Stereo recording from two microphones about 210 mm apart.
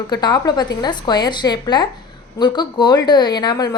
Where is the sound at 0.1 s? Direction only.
20° left (ahead or behind).